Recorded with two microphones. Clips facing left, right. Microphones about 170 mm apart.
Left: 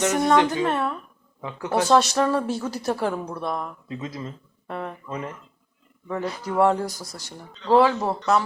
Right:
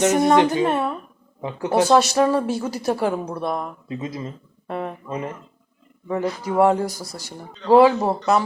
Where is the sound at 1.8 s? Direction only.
5° right (ahead or behind).